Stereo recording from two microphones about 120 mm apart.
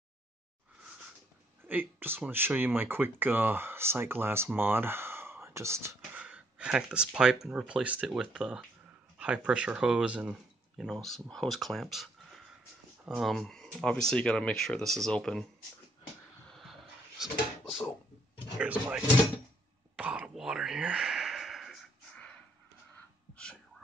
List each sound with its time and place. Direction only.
1.6 s speech: 15° right (ahead or behind)
6.1 s a sound: 10° right (ahead or behind)
7.4 s speech: 5° right (ahead or behind)
16.4 s music: centre (ahead or behind)
17.2 s speech: 5° right (ahead or behind)
20.0 s whispering: 10° right (ahead or behind)
23.3 s a sound: 10° left (ahead or behind)